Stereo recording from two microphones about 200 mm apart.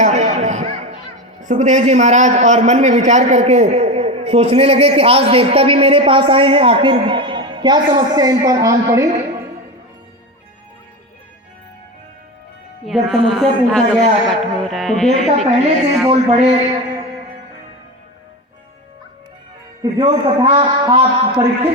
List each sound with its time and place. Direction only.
0.0 s a sound: 35° right (ahead or behind)
1.4 s a man's voice: 35° right (ahead or behind); by 9.0 s 15° right (ahead or behind)
12.8 s a man's voice: centre (ahead or behind)
15.3 s a man's voice: 30° right (ahead or behind)
19.8 s a man's voice: 20° right (ahead or behind)